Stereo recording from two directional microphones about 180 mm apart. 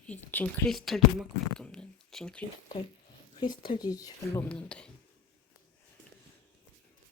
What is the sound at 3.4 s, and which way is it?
Speech, 30° left (ahead or behind).